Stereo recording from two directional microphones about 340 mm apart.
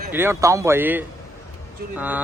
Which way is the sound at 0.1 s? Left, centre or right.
Centre.